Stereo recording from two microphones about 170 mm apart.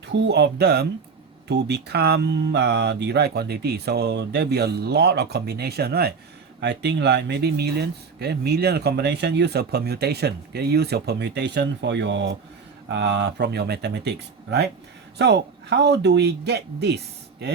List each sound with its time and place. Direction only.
0.0 s speech: 90° right; by 6.1 s 70° right (ahead or behind)
6.6 s speech: 85° right